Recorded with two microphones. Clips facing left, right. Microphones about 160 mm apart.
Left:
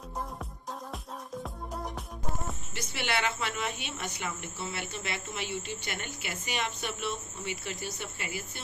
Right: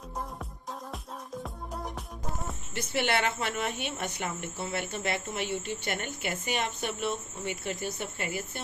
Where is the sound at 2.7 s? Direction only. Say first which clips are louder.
Right 5 dB; 55° right (ahead or behind).